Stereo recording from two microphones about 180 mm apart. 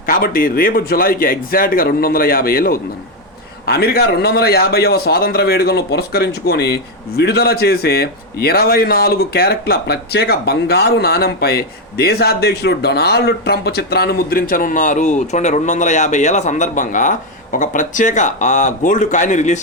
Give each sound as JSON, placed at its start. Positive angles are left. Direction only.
{"t": 0.0, "sound": "a man's voice", "side_deg": 50}